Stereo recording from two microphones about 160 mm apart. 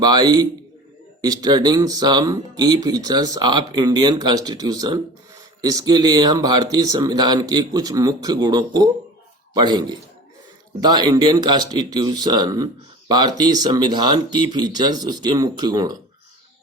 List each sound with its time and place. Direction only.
0.0 s speech: 25° right (ahead or behind)